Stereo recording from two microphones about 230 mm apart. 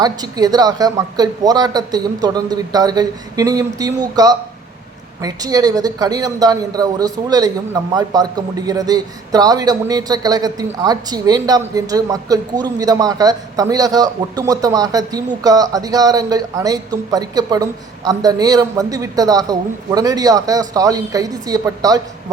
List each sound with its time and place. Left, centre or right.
0.0 s speech: centre